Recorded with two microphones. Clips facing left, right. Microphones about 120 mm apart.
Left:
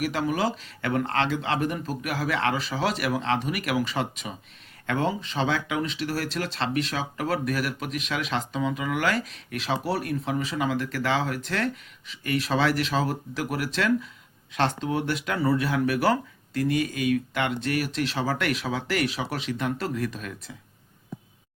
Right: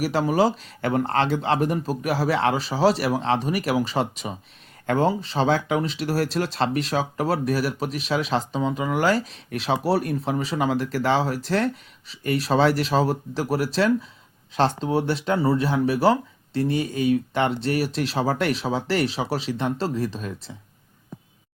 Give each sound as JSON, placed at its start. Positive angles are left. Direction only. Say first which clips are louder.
{"t": 0.0, "sound": "speech", "louder": "right 5 dB", "side_deg": -35}